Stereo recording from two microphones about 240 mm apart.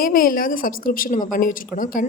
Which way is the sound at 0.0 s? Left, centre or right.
Left.